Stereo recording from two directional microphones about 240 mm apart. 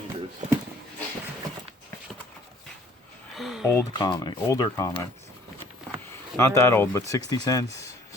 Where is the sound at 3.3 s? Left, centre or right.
Centre.